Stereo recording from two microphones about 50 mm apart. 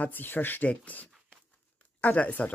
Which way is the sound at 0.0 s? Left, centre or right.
Left.